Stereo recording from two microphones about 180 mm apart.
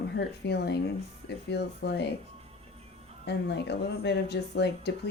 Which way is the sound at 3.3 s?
70° left (ahead or behind).